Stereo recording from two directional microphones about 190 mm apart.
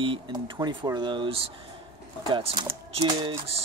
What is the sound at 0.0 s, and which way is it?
Speech, 25° right (ahead or behind).